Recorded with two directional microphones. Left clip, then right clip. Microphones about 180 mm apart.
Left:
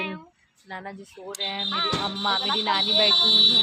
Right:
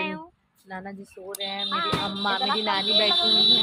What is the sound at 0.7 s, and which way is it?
Speech, 25° left (ahead or behind).